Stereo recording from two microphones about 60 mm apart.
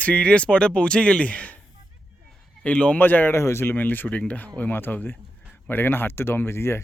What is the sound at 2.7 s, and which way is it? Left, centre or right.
Speech, left.